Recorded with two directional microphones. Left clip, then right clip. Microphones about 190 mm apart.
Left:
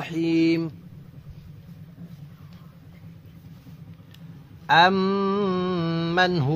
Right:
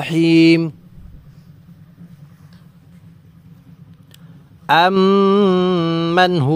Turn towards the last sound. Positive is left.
turn(degrees=-40)  # may be behind; listen again after turning